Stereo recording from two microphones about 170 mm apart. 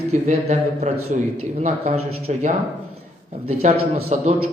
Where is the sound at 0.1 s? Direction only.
40° right (ahead or behind).